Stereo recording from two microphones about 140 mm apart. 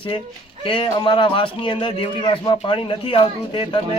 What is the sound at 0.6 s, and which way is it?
A man's voice, 35° left (ahead or behind).